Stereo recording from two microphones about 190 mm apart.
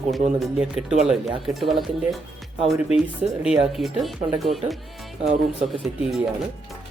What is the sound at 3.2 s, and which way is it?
Speech, 5° right (ahead or behind).